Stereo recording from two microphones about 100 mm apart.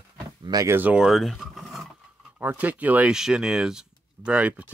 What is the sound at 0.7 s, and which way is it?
Speech, 20° right (ahead or behind).